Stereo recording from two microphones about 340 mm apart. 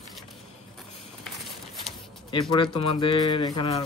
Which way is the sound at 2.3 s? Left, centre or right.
Centre.